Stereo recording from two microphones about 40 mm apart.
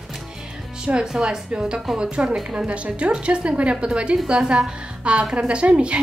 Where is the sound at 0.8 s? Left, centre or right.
Right.